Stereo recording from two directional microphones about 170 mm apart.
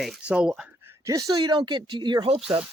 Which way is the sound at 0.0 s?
5° right (ahead or behind).